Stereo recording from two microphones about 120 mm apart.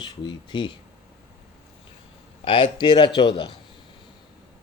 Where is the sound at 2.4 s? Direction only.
45° left (ahead or behind).